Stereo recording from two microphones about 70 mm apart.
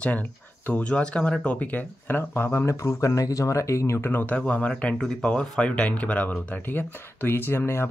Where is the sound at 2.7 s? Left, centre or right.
Left.